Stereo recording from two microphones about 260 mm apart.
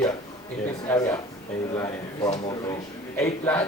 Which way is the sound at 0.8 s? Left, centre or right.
Centre.